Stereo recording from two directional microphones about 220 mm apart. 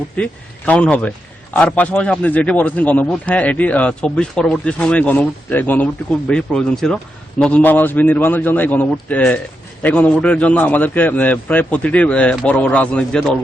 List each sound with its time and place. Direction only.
0.2 s a man's voice: 5° left (ahead or behind)